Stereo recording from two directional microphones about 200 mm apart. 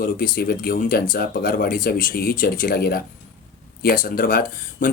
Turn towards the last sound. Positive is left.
turn(degrees=45)  # may be behind; listen again after turning